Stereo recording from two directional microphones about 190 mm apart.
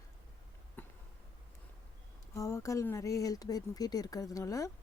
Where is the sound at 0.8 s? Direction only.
10° left (ahead or behind).